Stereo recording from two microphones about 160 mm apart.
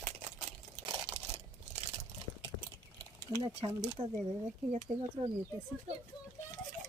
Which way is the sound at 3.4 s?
35° right (ahead or behind).